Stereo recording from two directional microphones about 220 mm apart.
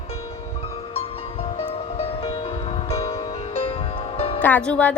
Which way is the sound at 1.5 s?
25° left (ahead or behind).